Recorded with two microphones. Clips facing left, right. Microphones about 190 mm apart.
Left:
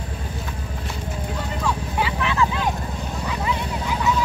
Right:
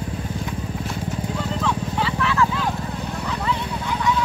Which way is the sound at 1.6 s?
15° left (ahead or behind).